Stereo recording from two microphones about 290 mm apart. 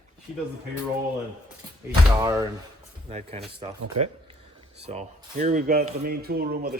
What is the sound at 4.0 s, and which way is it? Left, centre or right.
Speech, right.